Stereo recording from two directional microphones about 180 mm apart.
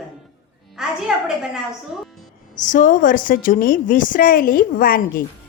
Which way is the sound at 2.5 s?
45° left (ahead or behind).